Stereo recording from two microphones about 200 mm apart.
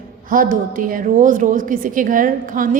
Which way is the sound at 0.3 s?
45° right (ahead or behind).